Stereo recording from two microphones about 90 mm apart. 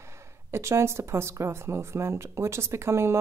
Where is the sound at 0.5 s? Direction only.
30° right (ahead or behind).